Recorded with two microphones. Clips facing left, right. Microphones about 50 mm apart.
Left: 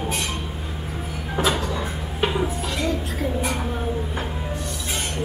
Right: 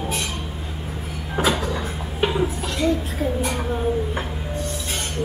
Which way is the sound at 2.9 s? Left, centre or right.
Right.